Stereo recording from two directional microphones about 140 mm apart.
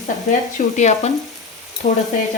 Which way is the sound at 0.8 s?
55° left (ahead or behind).